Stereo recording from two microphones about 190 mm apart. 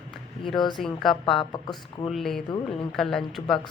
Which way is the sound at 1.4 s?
20° left (ahead or behind).